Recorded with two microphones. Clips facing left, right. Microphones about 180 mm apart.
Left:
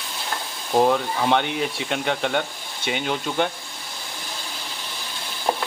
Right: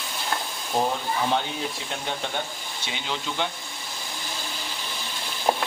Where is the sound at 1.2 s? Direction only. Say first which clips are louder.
Left 7 dB; 75° left (ahead or behind).